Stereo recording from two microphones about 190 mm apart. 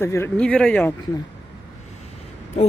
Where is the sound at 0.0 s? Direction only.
10° left (ahead or behind).